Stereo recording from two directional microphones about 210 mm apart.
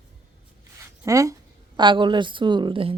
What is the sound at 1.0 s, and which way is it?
A woman's voice, 15° right (ahead or behind).